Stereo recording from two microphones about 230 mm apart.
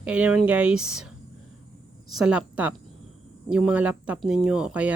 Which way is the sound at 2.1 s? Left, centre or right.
Centre.